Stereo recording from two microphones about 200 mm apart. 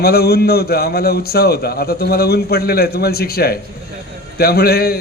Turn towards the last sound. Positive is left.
turn(degrees=50)  # may be behind; listen again after turning